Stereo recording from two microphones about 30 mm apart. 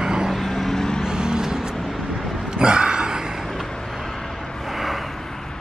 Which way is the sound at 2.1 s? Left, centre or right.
Right.